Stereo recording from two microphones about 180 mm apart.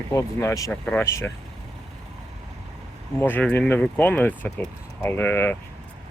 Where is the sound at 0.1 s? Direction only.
15° left (ahead or behind).